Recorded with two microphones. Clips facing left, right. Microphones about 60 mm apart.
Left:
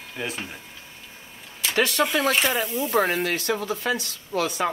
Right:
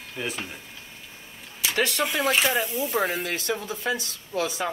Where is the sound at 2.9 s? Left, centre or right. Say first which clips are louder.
Left 5 dB; left.